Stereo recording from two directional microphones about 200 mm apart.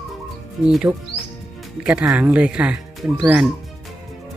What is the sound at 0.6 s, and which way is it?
Speech, 5° right (ahead or behind).